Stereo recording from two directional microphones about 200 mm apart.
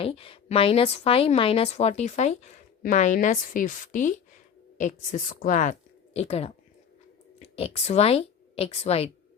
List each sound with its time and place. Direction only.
0.0 s a woman's voice: 30° left (ahead or behind)